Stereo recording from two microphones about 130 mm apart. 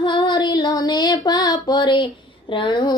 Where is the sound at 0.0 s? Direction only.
35° left (ahead or behind).